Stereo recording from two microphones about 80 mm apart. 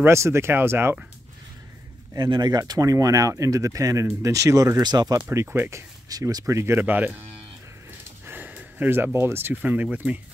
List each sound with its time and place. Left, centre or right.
0.0 s speech: right
2.1 s speech: right
2.6 s speech: right
5.3 s speech: right
6.1 s speech: right
6.4 s speech: right
8.3 s speech: right